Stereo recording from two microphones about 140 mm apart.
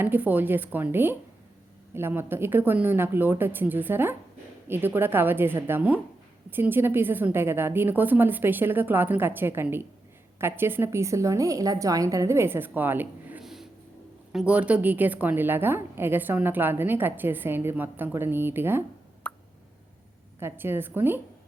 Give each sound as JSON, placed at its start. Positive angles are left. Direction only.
{"t": 0.0, "sound": "a woman's voice", "side_deg": -15}
{"t": 19.3, "sound": "plop", "side_deg": 10}
{"t": 20.4, "sound": "a woman's voice", "side_deg": -15}